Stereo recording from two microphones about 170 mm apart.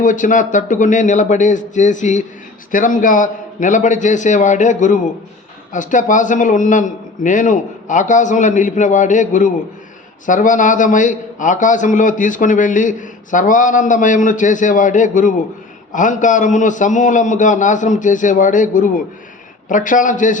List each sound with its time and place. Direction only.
0.0 s a man's voice: 50° left (ahead or behind)